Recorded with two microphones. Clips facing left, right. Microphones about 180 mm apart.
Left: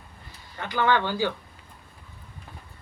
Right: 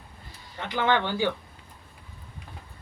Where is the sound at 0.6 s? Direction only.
20° right (ahead or behind).